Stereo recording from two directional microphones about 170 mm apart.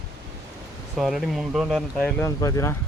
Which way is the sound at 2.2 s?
20° left (ahead or behind).